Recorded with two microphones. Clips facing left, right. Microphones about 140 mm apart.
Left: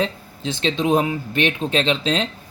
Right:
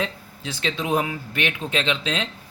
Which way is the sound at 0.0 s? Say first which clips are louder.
Left 5 dB; 25° left (ahead or behind).